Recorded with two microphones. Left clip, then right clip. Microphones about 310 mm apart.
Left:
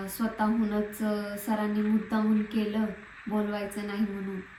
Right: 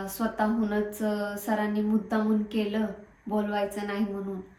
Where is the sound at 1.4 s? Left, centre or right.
Centre.